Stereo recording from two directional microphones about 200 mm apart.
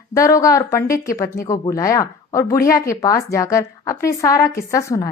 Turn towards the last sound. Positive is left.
turn(degrees=15)  # may be behind; listen again after turning